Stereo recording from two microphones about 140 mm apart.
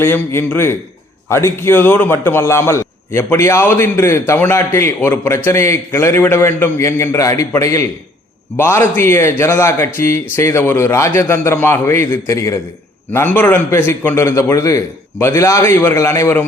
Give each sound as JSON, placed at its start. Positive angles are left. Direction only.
{"t": 0.0, "sound": "a man's voice", "side_deg": 20}